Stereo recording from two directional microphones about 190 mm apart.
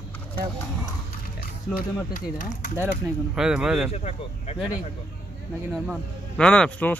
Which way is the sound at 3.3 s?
5° right (ahead or behind).